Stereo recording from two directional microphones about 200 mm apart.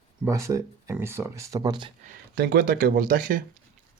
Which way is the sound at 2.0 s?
45° right (ahead or behind).